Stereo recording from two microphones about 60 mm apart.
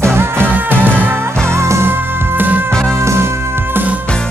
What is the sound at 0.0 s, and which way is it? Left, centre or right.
Music, right.